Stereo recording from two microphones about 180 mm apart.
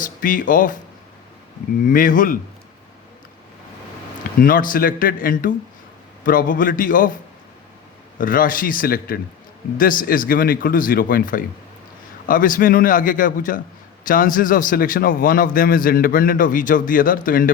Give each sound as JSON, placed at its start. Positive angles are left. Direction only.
{"t": 0.0, "sound": "a man's voice", "side_deg": 50}
{"t": 1.9, "sound": "a man's voice", "side_deg": 50}
{"t": 4.4, "sound": "a man's voice", "side_deg": 50}
{"t": 8.2, "sound": "a man's voice", "side_deg": 50}